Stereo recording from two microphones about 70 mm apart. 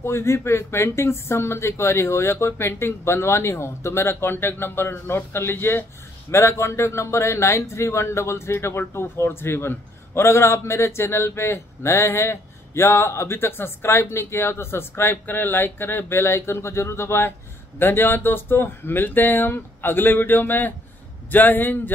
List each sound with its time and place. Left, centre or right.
0.0 s a man's voice: left